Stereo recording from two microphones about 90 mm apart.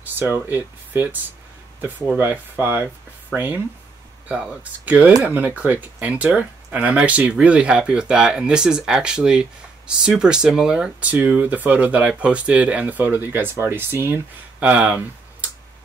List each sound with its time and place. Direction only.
0.0 s speech: 25° right (ahead or behind)
4.3 s speech: 5° right (ahead or behind)
4.8 s speech: 20° right (ahead or behind)